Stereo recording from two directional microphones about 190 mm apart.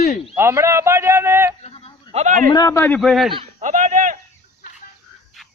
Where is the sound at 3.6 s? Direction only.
40° right (ahead or behind).